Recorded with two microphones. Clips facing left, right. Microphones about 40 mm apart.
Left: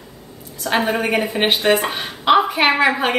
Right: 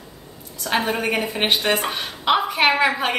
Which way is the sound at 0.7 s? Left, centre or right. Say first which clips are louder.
Left 3 dB; centre.